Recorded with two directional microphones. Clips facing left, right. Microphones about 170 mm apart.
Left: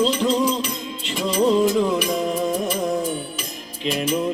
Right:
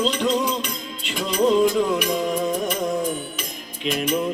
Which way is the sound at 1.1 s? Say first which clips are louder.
Even; centre (ahead or behind).